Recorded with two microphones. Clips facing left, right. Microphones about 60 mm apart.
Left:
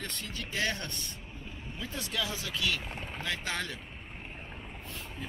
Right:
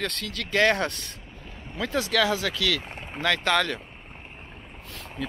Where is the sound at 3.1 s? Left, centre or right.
Right.